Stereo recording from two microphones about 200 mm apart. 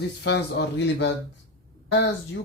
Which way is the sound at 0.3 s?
55° left (ahead or behind).